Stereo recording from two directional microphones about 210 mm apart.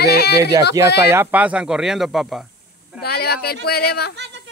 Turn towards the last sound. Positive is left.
turn(degrees=-55)  # may be behind; listen again after turning